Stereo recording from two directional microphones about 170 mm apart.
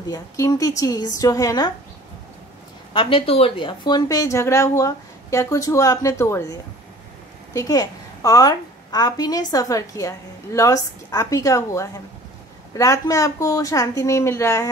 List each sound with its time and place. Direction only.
0.0 s a woman's voice: 20° left (ahead or behind)
2.9 s a woman's voice: 30° left (ahead or behind)